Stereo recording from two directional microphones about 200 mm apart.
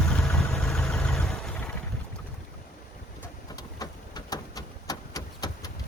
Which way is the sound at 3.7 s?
20° left (ahead or behind).